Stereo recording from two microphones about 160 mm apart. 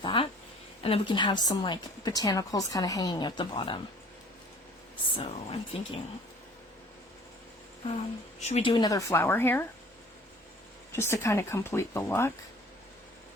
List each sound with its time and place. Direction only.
0.0 s a sound: 30° left (ahead or behind)
0.8 s a woman's voice: 35° left (ahead or behind)
5.1 s speech: 35° left (ahead or behind)
8.4 s a woman's voice: 40° left (ahead or behind); by 9.6 s 15° left (ahead or behind)
10.9 s speech: 15° left (ahead or behind)